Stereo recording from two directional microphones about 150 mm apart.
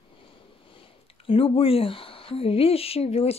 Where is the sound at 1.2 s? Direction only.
35° left (ahead or behind).